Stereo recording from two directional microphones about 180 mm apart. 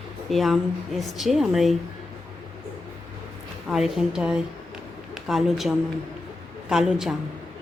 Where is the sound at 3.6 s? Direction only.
5° right (ahead or behind).